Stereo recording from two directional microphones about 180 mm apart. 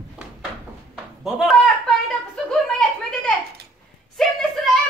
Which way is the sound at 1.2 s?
Centre (ahead or behind).